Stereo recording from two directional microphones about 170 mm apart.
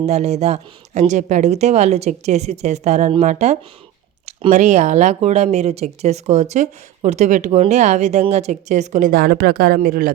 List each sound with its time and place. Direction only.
0.0 s speech: 40° right (ahead or behind); by 10.1 s 60° right (ahead or behind)